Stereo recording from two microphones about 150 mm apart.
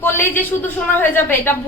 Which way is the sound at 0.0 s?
15° left (ahead or behind).